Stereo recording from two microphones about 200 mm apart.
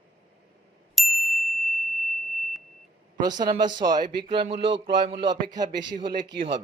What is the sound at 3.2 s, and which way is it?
Speech, 20° right (ahead or behind).